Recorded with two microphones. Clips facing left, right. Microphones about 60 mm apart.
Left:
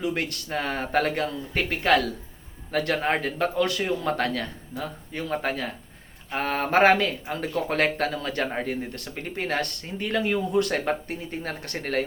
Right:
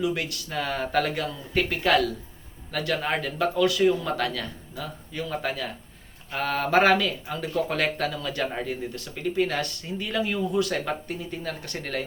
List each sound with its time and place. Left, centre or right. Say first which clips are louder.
0.0 s speech: right 1 dB; left
2.7 s speech: left 2 dB; left